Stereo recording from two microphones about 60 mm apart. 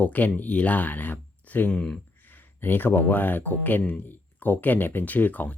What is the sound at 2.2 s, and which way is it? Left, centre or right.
Speech, left.